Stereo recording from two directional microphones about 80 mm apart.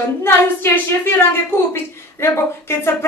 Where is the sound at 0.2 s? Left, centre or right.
Left.